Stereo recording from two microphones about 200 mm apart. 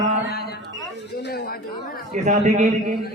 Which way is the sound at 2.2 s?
35° right (ahead or behind).